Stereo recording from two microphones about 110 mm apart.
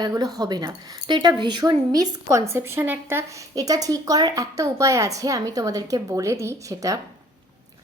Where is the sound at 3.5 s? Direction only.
35° right (ahead or behind).